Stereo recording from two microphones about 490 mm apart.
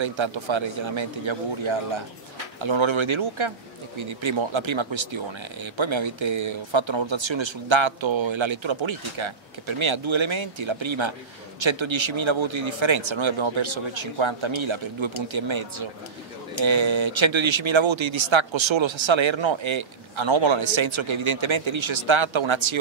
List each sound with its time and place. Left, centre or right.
0.0 s speech: right